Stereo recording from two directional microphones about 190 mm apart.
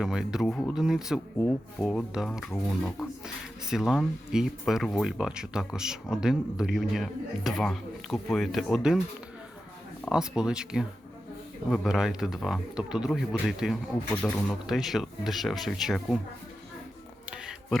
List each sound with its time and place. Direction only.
0.0 s speech: 5° right (ahead or behind)
10.1 s speech: 5° right (ahead or behind)
17.3 s a sound: 5° right (ahead or behind)